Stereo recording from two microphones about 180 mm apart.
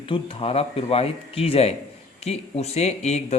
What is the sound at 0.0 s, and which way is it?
Speech, 30° left (ahead or behind).